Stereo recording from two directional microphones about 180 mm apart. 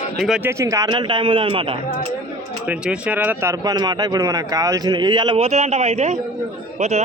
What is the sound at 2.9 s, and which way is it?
A man's voice, 10° right (ahead or behind).